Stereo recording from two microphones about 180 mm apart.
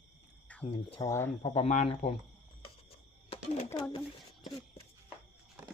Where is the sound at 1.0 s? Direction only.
15° left (ahead or behind).